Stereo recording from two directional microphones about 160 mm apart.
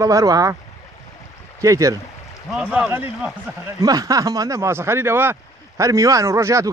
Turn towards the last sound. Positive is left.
turn(degrees=-20)  # may be behind; listen again after turning